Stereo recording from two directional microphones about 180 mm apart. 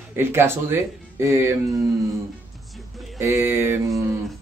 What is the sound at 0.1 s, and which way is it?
Speech, 15° right (ahead or behind).